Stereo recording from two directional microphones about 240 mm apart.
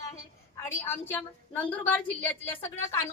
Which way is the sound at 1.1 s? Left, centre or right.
Centre.